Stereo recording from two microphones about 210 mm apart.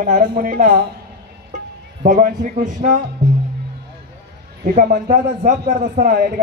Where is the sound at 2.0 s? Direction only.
40° right (ahead or behind).